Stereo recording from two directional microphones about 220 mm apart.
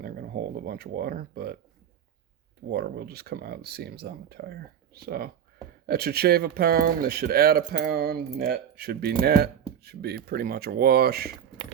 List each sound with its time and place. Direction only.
0.0 s speech: 45° right (ahead or behind)
2.6 s speech: 45° right (ahead or behind)